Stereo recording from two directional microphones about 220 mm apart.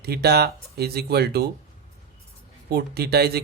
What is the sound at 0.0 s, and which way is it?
Speech, 45° right (ahead or behind).